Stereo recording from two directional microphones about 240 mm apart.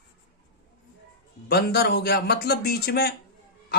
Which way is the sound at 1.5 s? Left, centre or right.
Left.